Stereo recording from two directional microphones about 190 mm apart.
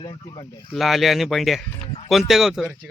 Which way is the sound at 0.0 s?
30° left (ahead or behind).